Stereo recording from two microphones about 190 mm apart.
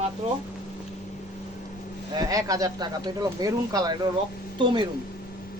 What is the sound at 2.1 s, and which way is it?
Speech, 20° right (ahead or behind).